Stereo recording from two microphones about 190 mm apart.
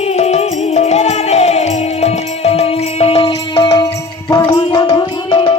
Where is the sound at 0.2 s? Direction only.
35° left (ahead or behind).